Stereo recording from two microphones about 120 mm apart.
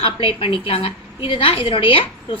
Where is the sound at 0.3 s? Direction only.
50° left (ahead or behind).